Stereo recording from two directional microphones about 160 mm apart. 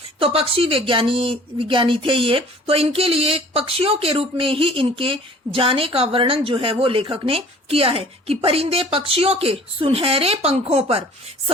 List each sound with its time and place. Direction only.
0.2 s speech: 35° right (ahead or behind)